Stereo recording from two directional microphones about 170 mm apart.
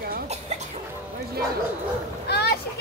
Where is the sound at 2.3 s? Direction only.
70° left (ahead or behind).